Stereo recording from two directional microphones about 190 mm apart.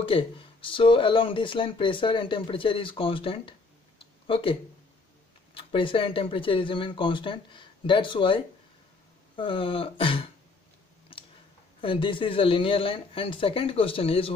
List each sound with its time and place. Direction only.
0.0 s speech: 30° left (ahead or behind)
9.4 s speech: 25° left (ahead or behind)
11.8 s speech: 25° left (ahead or behind)